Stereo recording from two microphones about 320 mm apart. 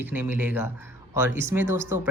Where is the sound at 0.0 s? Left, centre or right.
Centre.